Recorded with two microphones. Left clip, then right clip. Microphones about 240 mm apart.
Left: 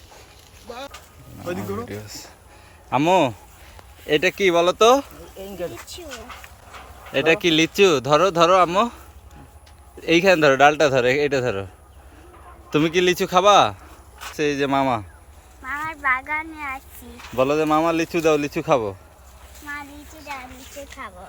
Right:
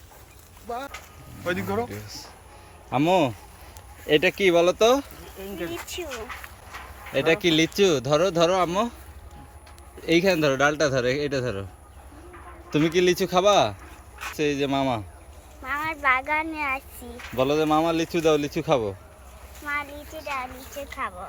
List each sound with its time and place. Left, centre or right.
1.9 s speech: centre
7.1 s speech: centre
10.0 s speech: centre
12.7 s speech: centre
15.6 s a sound: right
17.3 s speech: centre